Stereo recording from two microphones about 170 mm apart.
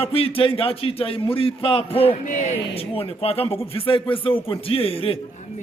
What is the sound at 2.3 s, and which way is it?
A man's voice, 45° left (ahead or behind).